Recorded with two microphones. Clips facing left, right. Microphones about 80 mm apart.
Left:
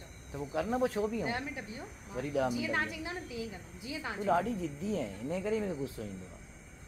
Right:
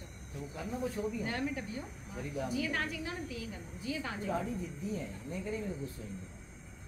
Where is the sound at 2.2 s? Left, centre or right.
Left.